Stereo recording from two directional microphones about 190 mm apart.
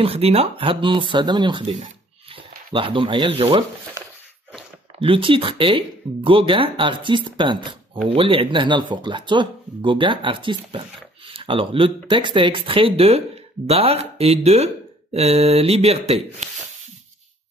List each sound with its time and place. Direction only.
0.0 s speech: 30° right (ahead or behind)
5.0 s speech: 25° right (ahead or behind)